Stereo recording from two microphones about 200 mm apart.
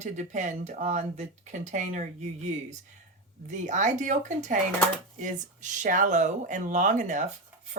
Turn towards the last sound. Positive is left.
turn(degrees=-40)  # may be behind; listen again after turning